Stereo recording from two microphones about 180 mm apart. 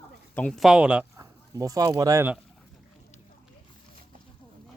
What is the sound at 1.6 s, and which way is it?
Speech, 20° right (ahead or behind).